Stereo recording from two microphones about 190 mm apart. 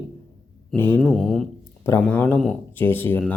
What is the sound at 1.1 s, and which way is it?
Speech, centre (ahead or behind).